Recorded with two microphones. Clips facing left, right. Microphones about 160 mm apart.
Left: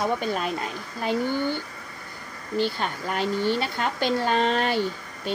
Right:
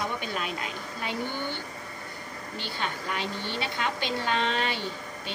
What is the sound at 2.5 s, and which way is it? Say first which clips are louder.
A woman's voice: left 9 dB; 45° left (ahead or behind).